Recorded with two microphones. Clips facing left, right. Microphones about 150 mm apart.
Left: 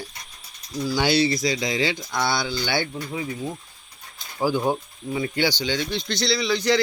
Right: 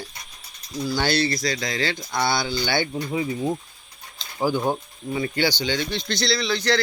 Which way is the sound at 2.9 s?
25° right (ahead or behind).